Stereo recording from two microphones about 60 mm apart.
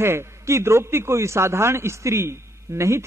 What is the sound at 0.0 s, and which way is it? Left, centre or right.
A man's voice, right.